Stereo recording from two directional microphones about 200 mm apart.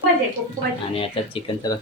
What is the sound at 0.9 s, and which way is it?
Speech, 25° left (ahead or behind).